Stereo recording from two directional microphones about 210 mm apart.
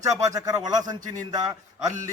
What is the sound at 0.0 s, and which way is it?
Speech, 15° right (ahead or behind).